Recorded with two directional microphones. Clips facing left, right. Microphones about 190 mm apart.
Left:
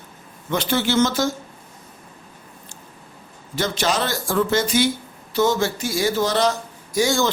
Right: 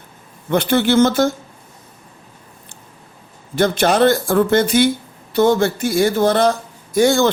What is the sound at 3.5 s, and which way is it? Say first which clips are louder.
Speech: right 7 dB; 55° right (ahead or behind).